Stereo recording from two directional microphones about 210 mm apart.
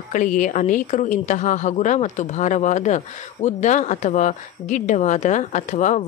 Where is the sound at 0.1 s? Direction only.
40° left (ahead or behind).